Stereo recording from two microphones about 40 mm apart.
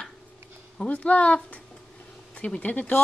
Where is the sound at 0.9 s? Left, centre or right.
Left.